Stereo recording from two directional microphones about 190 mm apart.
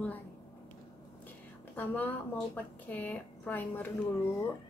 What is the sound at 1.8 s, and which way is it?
Speech, 10° left (ahead or behind).